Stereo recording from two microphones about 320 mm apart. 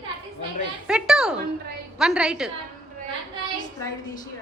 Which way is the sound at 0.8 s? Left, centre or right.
Centre.